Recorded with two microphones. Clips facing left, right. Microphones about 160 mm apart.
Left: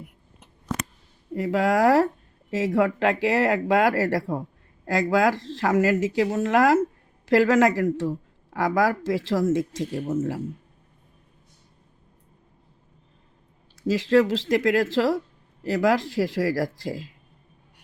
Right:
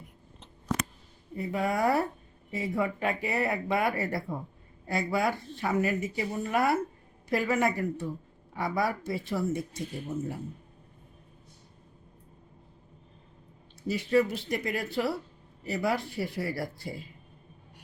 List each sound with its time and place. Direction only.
1.3 s speech: 90° left
13.8 s speech: 90° left